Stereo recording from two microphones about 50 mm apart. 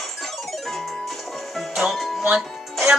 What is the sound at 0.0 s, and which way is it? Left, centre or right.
Music, centre.